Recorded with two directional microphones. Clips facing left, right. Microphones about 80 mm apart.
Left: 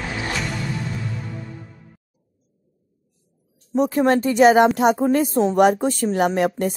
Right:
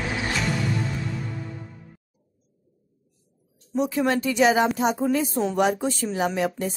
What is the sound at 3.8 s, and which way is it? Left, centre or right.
Speech, left.